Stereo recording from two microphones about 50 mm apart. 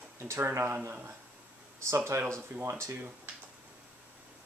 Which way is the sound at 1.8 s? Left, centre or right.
Right.